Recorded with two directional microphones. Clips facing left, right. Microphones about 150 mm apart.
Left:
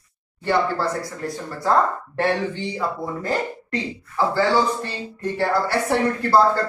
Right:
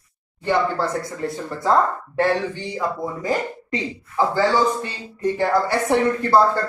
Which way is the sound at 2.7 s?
15° right (ahead or behind).